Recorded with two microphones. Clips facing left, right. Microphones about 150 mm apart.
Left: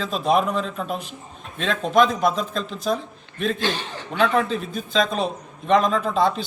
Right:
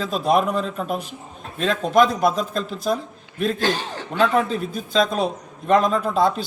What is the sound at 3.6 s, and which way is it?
Speech, 40° right (ahead or behind).